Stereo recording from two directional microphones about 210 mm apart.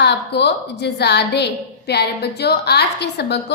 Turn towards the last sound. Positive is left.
turn(degrees=55)  # may be behind; listen again after turning